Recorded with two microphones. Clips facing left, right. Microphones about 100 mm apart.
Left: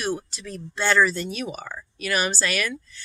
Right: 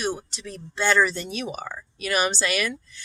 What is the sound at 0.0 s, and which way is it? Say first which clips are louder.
Speech: left 1 dB; 20° right (ahead or behind).